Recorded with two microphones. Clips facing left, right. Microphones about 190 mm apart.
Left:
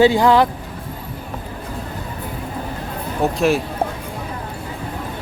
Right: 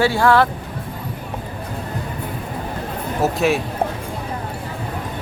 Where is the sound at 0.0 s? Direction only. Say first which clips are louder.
Left 3 dB; 15° left (ahead or behind).